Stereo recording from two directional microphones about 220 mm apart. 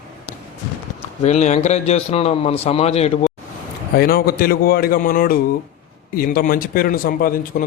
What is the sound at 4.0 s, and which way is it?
Speech, 45° left (ahead or behind).